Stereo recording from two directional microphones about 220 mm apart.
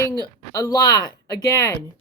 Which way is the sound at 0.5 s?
15° left (ahead or behind).